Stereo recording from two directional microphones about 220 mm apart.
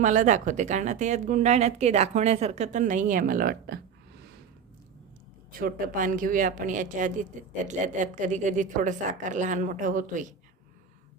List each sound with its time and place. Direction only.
0.0 s speech: 35° right (ahead or behind)
5.5 s speech: 40° right (ahead or behind)